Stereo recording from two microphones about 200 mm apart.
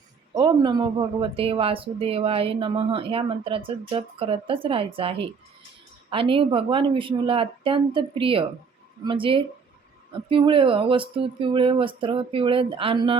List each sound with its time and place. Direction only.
0.3 s speech: 20° right (ahead or behind)